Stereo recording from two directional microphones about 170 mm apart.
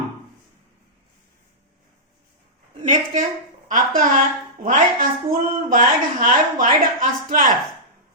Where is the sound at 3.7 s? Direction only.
50° right (ahead or behind).